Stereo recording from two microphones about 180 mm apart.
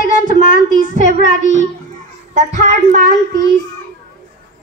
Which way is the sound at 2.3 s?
40° right (ahead or behind).